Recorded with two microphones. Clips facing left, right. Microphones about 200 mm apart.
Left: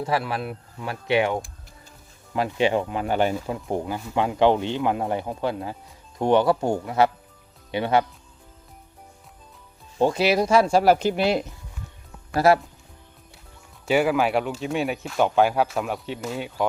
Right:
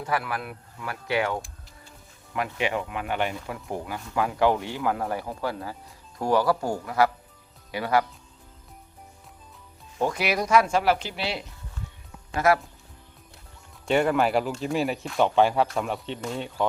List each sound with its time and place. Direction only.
0.0 s speech: 25° left (ahead or behind)
10.0 s speech: 30° left (ahead or behind); by 11.4 s 50° left (ahead or behind)
13.8 s speech: 5° left (ahead or behind)